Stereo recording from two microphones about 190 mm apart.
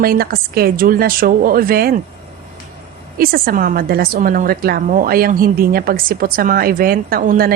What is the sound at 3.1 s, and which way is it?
A woman's voice, 50° right (ahead or behind).